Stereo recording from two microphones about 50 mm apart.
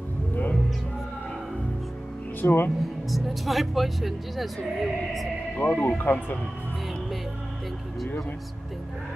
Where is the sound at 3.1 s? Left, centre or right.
Centre.